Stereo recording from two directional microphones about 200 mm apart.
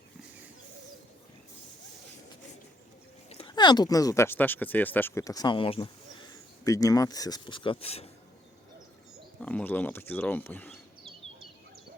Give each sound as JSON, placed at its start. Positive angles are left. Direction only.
{"t": 3.2, "sound": "speech", "side_deg": 30}
{"t": 9.4, "sound": "speech", "side_deg": 5}